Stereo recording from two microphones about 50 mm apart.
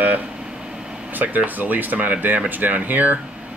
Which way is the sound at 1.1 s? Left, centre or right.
Right.